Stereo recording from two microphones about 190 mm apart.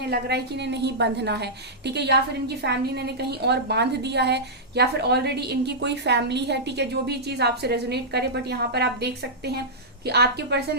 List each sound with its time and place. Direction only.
0.1 s a woman's voice: 60° right (ahead or behind)